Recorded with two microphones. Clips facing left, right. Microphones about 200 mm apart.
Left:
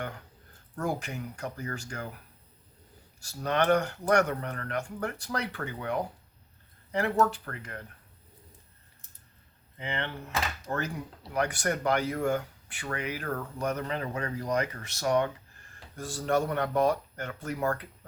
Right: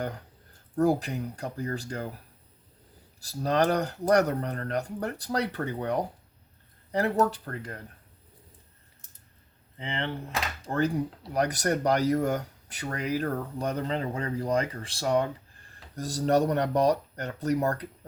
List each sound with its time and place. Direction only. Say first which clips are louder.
0.8 s speech: right 8 dB; 35° right (ahead or behind)
3.2 s speech: right 3 dB; 35° right (ahead or behind)
9.7 s speech: right 2 dB; 30° right (ahead or behind)